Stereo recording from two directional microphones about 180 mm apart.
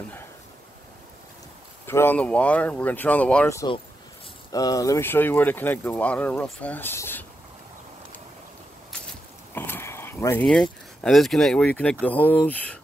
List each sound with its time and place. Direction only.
1.9 s speech: 10° left (ahead or behind)
9.5 s speech: 10° left (ahead or behind)